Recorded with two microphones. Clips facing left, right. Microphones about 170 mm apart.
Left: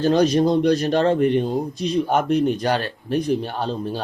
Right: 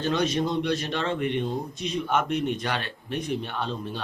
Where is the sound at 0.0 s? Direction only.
35° left (ahead or behind).